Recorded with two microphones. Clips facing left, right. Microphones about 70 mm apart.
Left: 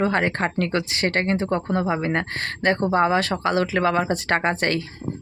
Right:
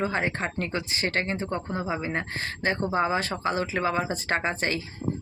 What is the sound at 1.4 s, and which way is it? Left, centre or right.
Speech, left.